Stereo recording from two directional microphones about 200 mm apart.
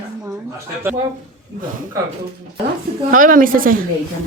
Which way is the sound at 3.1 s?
40° right (ahead or behind).